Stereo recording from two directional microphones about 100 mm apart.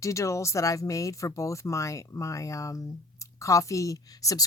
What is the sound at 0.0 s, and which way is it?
Speech, 30° left (ahead or behind).